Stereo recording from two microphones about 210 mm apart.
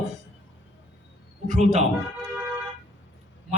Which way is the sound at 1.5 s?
35° right (ahead or behind).